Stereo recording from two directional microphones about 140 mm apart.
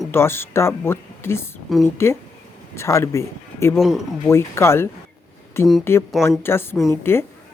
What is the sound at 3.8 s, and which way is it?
Speech, 5° right (ahead or behind).